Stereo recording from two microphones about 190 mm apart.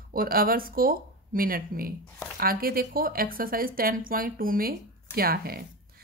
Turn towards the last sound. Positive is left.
turn(degrees=-50)  # may be behind; listen again after turning